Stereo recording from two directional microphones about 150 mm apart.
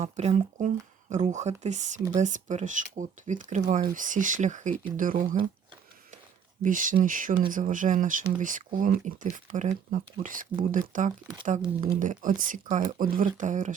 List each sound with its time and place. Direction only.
0.0 s speech: 50° right (ahead or behind); by 5.4 s 65° right (ahead or behind)
6.6 s speech: 60° right (ahead or behind)